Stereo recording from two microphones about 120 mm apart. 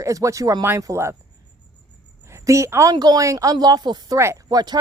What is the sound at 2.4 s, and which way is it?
A woman's voice, 25° right (ahead or behind).